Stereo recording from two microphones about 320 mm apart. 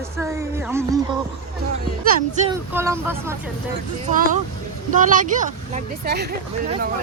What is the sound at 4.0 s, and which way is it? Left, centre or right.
Speech, right.